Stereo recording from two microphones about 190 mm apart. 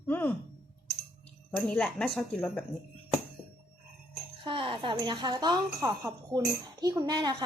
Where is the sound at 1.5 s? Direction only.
5° left (ahead or behind).